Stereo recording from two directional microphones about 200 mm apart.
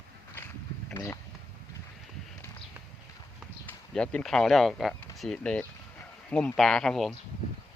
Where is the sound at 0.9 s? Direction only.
15° left (ahead or behind).